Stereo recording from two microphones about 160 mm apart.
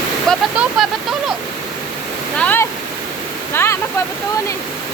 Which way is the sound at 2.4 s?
10° left (ahead or behind).